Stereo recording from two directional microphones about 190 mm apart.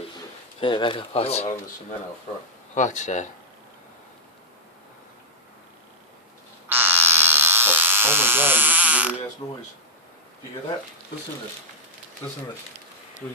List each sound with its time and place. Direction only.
0.6 s speech: 25° left (ahead or behind)
2.7 s speech: 40° left (ahead or behind)
6.7 s electric shaver: 10° right (ahead or behind)
9.4 s speech: 15° left (ahead or behind)